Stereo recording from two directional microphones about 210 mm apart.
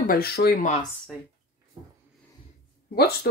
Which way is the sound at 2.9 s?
50° left (ahead or behind).